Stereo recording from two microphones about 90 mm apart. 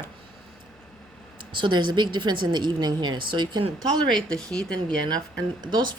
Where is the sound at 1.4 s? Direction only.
65° right (ahead or behind).